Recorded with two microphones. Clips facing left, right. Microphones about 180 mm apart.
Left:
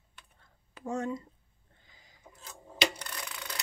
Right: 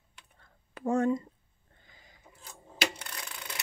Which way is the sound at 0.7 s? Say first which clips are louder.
Right 7 dB; 55° right (ahead or behind).